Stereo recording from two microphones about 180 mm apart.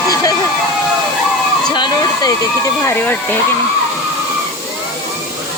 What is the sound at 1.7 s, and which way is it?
Hair dryer, 25° left (ahead or behind).